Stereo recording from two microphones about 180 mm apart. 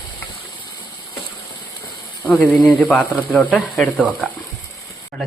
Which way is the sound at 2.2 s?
10° left (ahead or behind).